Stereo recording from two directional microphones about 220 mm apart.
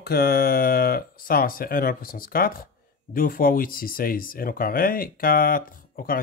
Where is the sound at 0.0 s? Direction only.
45° left (ahead or behind).